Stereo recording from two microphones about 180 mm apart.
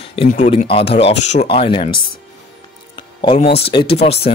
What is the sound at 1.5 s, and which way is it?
Speech, 30° left (ahead or behind).